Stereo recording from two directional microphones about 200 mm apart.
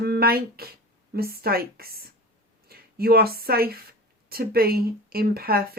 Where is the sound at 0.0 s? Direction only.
50° right (ahead or behind).